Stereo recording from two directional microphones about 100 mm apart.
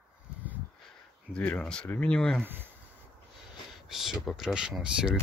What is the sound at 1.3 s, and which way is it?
Speech, 10° left (ahead or behind).